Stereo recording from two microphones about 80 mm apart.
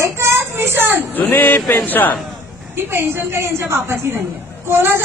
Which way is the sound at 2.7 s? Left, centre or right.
Right.